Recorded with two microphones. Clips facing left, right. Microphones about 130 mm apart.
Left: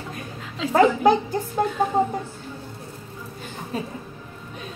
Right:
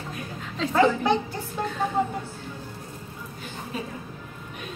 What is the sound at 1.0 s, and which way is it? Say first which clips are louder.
Speech: left 6 dB; 40° left (ahead or behind).